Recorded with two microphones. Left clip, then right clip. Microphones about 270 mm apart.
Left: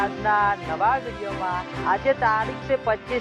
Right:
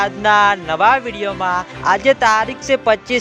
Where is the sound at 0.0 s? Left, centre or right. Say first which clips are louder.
Right 8 dB; right.